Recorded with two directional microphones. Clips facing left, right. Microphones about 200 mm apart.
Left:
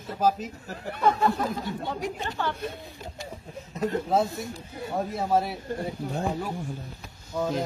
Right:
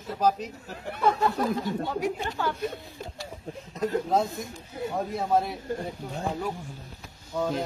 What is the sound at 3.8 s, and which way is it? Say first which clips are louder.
A man's voice: even; 5° left (ahead or behind).